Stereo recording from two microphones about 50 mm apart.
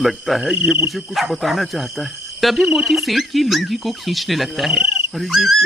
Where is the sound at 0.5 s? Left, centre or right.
Centre.